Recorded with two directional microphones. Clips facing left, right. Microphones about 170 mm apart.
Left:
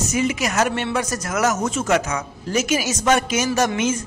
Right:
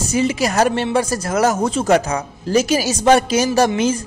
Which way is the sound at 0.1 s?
30° right (ahead or behind).